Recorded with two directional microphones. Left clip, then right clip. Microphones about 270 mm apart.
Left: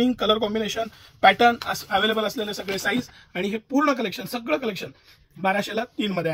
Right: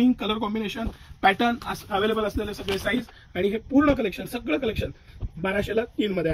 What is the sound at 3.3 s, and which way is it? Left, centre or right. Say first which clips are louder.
Speech: right 2 dB; left.